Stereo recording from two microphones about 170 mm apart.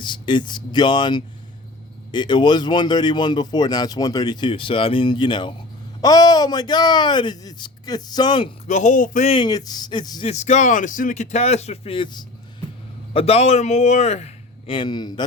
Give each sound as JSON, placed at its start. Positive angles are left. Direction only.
{"t": 0.0, "sound": "speech", "side_deg": 25}
{"t": 8.6, "sound": "speech", "side_deg": 45}
{"t": 9.3, "sound": "speech", "side_deg": 25}
{"t": 10.2, "sound": "a man's voice", "side_deg": 40}